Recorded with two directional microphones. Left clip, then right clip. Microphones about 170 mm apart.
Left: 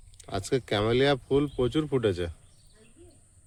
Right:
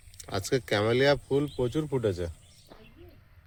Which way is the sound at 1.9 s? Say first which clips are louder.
Left 2 dB; 30° left (ahead or behind).